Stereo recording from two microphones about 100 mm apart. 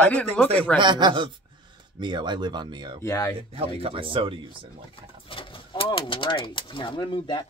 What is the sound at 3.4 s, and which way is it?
Speech, 70° right (ahead or behind).